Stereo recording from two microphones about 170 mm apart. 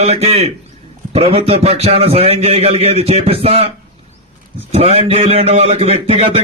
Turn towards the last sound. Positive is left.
turn(degrees=-35)  # may be behind; listen again after turning